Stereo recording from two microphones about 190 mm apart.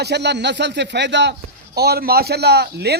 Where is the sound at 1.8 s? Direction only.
55° right (ahead or behind).